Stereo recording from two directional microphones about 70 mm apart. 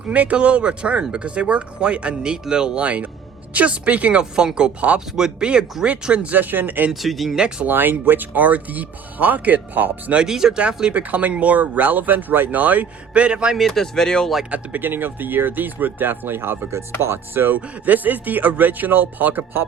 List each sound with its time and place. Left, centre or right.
0.0 s speech: centre
6.9 s speech: centre
7.3 s speech: centre
7.7 s speech: right
10.2 s speech: centre
13.6 s speech: centre
14.5 s speech: right